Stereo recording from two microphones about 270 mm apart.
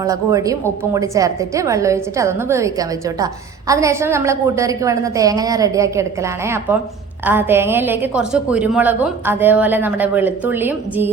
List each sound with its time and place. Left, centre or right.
0.0 s a woman's voice: centre